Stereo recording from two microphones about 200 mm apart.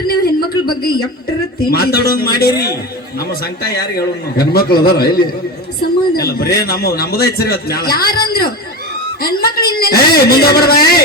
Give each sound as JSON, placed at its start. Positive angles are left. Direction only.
{"t": 0.1, "sound": "a sound", "side_deg": 50}
{"t": 0.7, "sound": "a man's voice", "side_deg": 50}
{"t": 8.3, "sound": "chatter", "side_deg": 50}
{"t": 9.2, "sound": "a man's voice", "side_deg": 50}